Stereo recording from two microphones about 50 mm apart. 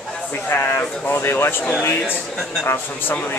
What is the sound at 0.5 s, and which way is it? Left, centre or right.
Speech, left.